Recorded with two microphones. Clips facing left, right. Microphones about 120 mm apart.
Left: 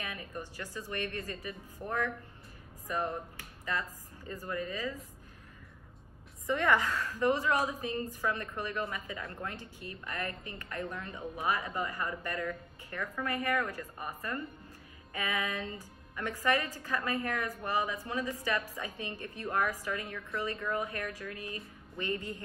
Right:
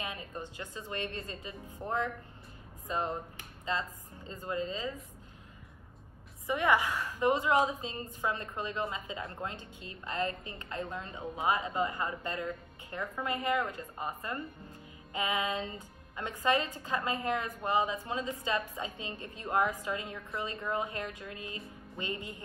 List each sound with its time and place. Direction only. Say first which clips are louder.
0.0 s a woman's voice: right 1 dB; 20° right (ahead or behind)
6.4 s a woman's voice: even; 15° right (ahead or behind)